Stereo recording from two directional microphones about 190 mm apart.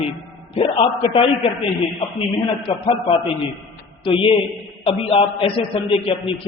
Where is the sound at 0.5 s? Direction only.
30° left (ahead or behind).